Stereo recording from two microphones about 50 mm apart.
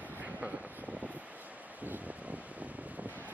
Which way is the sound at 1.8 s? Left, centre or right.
Right.